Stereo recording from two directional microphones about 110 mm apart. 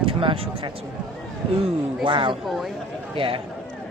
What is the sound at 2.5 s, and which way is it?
Speech, centre (ahead or behind).